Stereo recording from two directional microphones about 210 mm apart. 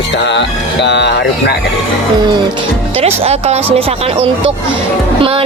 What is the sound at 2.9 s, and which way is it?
Speech, 30° right (ahead or behind).